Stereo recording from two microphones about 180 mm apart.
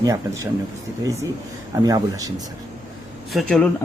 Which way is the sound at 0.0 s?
15° right (ahead or behind).